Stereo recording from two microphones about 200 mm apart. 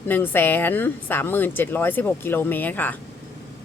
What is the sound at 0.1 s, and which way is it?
A woman's voice, 10° left (ahead or behind).